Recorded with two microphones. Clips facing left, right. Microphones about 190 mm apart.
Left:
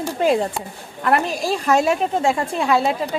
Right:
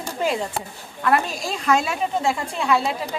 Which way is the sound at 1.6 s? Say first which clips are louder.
Left 3 dB; 40° left (ahead or behind).